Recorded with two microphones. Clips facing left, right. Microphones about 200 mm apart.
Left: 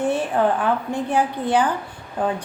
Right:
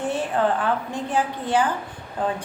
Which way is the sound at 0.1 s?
15° left (ahead or behind).